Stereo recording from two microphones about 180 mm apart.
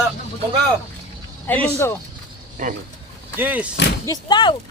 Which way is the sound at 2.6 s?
45° right (ahead or behind).